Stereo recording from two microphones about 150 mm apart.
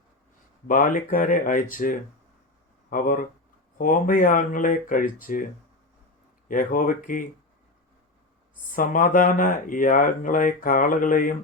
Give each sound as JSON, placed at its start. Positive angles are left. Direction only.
{"t": 0.7, "sound": "speech", "side_deg": 65}
{"t": 6.5, "sound": "speech", "side_deg": 65}
{"t": 8.7, "sound": "speech", "side_deg": 65}